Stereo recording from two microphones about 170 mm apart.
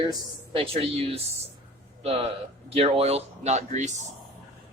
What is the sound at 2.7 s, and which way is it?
Speech, 35° right (ahead or behind).